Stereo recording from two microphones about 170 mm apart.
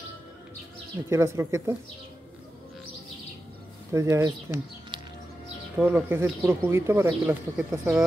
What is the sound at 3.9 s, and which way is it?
Speech, 20° right (ahead or behind).